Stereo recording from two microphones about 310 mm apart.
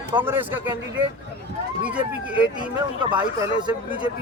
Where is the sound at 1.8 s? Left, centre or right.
Centre.